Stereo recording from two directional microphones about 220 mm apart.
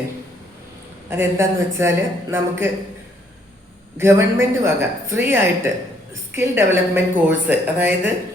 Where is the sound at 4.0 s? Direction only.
10° right (ahead or behind).